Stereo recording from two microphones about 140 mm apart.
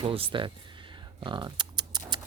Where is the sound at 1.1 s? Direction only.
30° right (ahead or behind).